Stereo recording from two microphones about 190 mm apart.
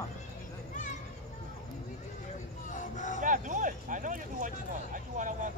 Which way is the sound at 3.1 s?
45° right (ahead or behind).